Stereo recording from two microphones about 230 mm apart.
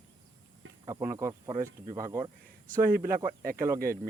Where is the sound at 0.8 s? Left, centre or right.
Centre.